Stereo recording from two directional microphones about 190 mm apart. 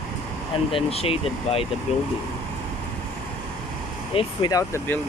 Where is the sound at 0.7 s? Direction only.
30° left (ahead or behind).